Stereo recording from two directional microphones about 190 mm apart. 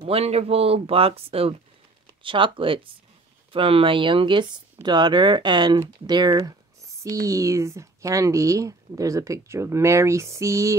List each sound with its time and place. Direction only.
0.0 s speech: 30° right (ahead or behind); by 10.7 s 15° right (ahead or behind)